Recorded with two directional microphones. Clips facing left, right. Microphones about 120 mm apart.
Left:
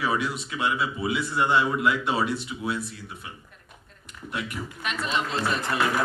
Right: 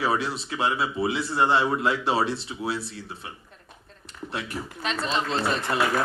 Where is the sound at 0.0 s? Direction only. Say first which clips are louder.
Right 1 dB; 30° right (ahead or behind).